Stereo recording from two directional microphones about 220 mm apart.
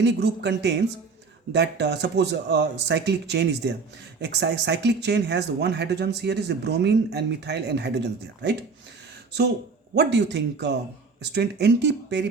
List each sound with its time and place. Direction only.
0.0 s speech: 55° right (ahead or behind)
9.9 s speech: 50° right (ahead or behind)